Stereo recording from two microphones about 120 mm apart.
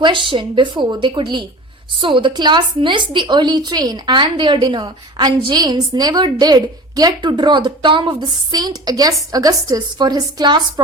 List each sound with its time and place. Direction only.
0.0 s a woman's voice: 45° right (ahead or behind)